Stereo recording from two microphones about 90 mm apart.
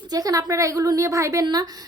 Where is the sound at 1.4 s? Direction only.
50° right (ahead or behind).